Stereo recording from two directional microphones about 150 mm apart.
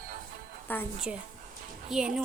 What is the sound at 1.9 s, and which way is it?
Speech, centre (ahead or behind).